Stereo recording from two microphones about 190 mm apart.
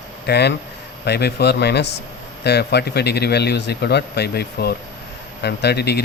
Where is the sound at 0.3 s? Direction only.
60° left (ahead or behind).